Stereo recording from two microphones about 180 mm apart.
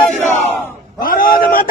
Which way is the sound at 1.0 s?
50° left (ahead or behind).